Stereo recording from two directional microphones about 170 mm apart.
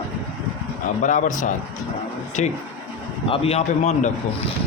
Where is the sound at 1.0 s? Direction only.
50° left (ahead or behind).